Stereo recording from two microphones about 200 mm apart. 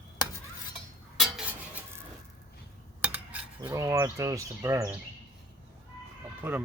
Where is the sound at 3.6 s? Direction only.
15° right (ahead or behind).